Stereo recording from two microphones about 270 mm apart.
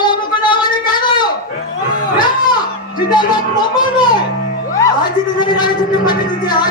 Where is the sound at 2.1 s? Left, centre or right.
Centre.